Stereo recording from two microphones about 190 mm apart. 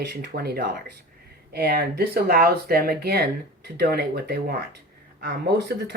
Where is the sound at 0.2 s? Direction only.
55° right (ahead or behind).